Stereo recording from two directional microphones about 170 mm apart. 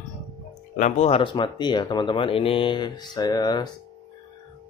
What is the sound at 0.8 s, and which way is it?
Speech, 40° left (ahead or behind).